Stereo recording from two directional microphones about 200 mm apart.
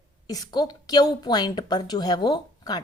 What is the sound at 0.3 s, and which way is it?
A woman's voice, 20° left (ahead or behind).